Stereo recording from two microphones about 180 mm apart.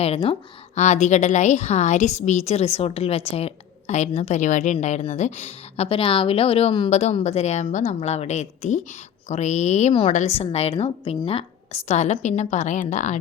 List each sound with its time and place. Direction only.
0.0 s a woman's voice: 35° left (ahead or behind)